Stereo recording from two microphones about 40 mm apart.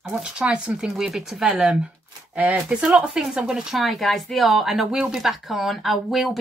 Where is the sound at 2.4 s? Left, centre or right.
Right.